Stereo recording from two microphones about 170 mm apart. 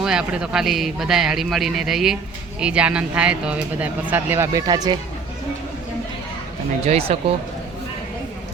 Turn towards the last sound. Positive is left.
turn(degrees=-35)  # may be behind; listen again after turning